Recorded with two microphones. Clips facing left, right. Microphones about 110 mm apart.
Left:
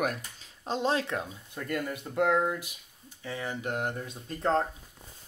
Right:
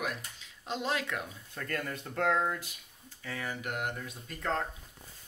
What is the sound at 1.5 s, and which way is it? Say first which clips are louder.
Speech: left 4 dB; 15° left (ahead or behind).